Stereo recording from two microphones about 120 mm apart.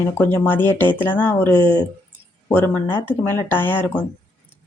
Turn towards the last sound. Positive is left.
turn(degrees=15)  # may be behind; listen again after turning